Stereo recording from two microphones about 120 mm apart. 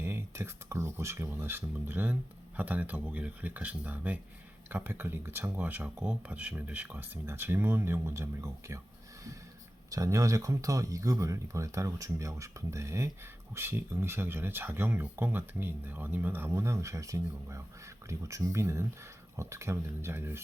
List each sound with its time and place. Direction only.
0.0 s speech: 20° right (ahead or behind)
9.9 s speech: 25° right (ahead or behind)